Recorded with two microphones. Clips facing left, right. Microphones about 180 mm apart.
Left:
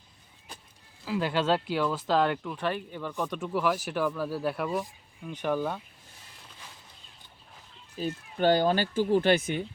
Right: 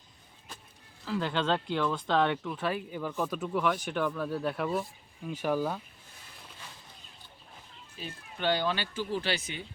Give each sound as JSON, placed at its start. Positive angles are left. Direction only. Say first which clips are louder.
{"t": 1.0, "sound": "speech", "louder": "left 3 dB", "side_deg": 10}
{"t": 7.9, "sound": "speech", "louder": "left 10 dB", "side_deg": 45}